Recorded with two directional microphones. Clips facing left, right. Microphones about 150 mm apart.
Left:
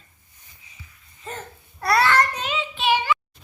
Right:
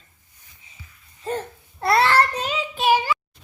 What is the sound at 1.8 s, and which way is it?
Child singing, 25° right (ahead or behind).